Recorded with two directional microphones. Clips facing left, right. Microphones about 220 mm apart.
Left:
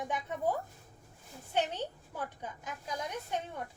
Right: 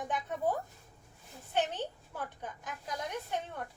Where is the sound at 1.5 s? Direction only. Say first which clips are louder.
Even; 10° left (ahead or behind).